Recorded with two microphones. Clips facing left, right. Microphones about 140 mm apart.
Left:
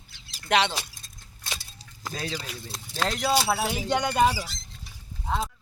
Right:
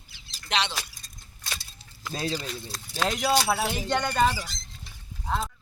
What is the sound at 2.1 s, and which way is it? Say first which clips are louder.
Speech: right 3 dB; 30° right (ahead or behind).